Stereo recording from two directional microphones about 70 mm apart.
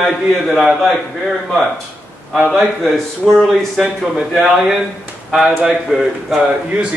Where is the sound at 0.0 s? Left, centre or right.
Centre.